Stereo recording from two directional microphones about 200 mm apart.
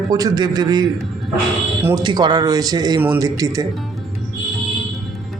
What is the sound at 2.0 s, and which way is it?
Speech, 20° right (ahead or behind).